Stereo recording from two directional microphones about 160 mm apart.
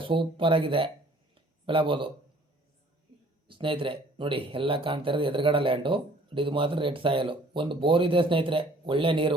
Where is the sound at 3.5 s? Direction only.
30° right (ahead or behind).